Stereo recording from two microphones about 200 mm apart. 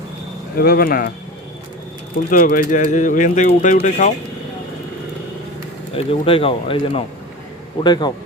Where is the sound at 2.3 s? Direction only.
40° left (ahead or behind).